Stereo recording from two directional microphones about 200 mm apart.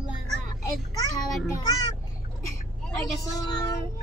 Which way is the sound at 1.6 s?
20° left (ahead or behind).